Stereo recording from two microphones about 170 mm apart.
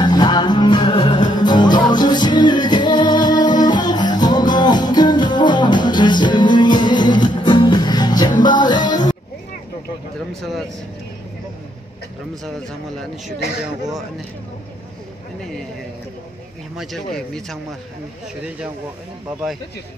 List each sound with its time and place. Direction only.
0.0 s music: 25° left (ahead or behind)
10.4 s speech: centre (ahead or behind)
16.7 s speech: centre (ahead or behind)